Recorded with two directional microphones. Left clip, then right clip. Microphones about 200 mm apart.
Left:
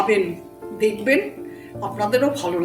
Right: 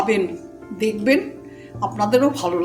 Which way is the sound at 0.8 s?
55° right (ahead or behind).